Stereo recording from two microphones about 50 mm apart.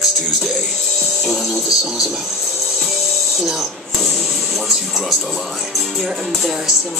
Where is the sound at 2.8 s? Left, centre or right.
Centre.